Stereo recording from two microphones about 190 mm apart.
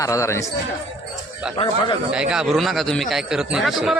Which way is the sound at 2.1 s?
5° right (ahead or behind).